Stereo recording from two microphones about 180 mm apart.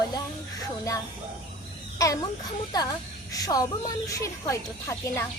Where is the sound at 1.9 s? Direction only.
20° left (ahead or behind).